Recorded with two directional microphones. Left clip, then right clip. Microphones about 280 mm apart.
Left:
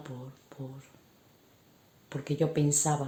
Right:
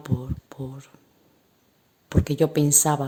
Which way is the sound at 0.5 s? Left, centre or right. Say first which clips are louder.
Right 7 dB; right.